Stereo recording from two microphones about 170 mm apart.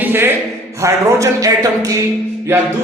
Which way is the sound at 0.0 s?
10° right (ahead or behind).